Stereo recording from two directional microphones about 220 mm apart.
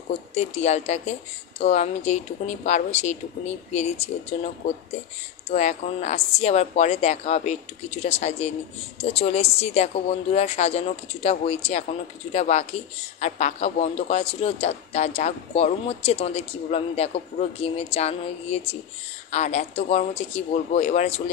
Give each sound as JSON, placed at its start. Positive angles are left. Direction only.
{"t": 0.1, "sound": "a man's voice", "side_deg": 30}